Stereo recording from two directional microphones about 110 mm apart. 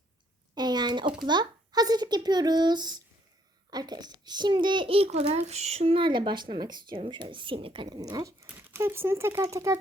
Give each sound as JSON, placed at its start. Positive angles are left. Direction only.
{"t": 0.5, "sound": "a sound", "side_deg": -40}
{"t": 1.3, "sound": "a child's voice", "side_deg": -40}
{"t": 6.0, "sound": "a woman's voice", "side_deg": -45}